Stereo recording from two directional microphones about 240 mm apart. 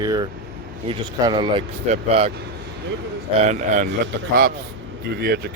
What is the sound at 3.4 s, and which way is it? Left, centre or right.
Speech, right.